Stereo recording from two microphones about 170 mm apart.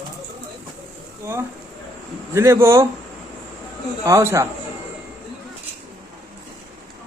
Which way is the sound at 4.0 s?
15° right (ahead or behind).